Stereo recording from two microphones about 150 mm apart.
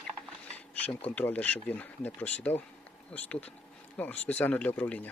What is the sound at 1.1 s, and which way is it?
Speech, 10° left (ahead or behind).